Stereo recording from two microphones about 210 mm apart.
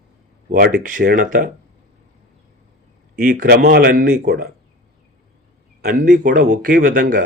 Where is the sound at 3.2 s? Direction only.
40° right (ahead or behind).